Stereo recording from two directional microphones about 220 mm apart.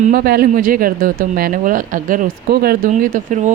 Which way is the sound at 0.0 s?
40° right (ahead or behind).